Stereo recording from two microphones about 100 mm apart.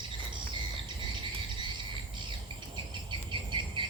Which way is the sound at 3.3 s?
50° right (ahead or behind).